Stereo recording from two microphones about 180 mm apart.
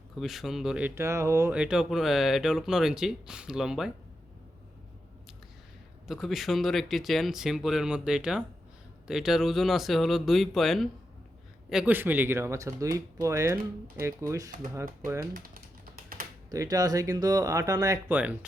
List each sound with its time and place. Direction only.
0.2 s speech: centre (ahead or behind)
6.1 s speech: centre (ahead or behind)
16.5 s speech: 20° right (ahead or behind)